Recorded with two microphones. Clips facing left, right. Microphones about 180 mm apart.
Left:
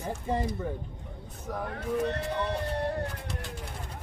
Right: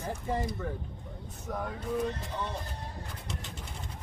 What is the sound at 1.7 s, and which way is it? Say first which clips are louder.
Speech: left 4 dB; 70° left (ahead or behind).